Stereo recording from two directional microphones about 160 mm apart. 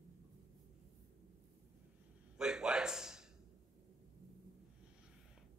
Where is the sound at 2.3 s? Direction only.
5° right (ahead or behind).